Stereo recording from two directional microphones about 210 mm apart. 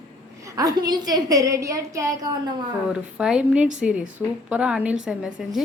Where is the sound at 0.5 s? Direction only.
20° right (ahead or behind).